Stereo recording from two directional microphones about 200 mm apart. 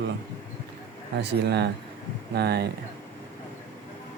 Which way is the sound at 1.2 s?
55° right (ahead or behind).